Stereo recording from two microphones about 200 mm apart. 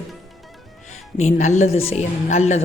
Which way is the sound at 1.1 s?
35° left (ahead or behind).